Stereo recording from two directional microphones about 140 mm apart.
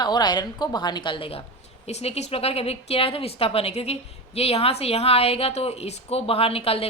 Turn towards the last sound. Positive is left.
turn(degrees=45)  # may be behind; listen again after turning